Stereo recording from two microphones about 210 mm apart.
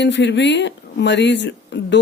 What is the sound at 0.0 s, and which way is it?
Speech, 55° left (ahead or behind).